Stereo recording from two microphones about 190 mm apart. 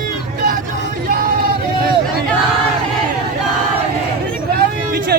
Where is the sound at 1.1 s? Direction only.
50° right (ahead or behind).